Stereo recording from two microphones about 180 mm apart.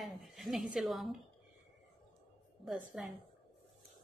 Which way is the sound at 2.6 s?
Centre (ahead or behind).